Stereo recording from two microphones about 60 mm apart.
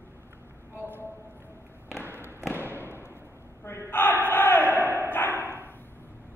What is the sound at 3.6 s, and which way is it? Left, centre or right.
Battle cry, left.